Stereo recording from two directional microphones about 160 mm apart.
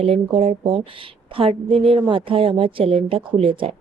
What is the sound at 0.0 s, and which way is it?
Speech, 35° right (ahead or behind).